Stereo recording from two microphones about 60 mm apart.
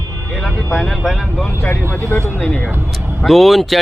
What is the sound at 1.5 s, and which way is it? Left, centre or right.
Speech, left.